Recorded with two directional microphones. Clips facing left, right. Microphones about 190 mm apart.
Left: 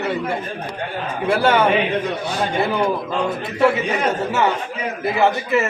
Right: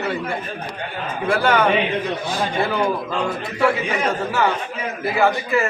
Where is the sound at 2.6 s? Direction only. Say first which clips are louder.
Left 1 dB; 20° left (ahead or behind).